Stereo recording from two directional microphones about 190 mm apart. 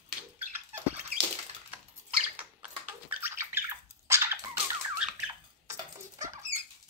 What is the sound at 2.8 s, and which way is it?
Dog, 10° right (ahead or behind).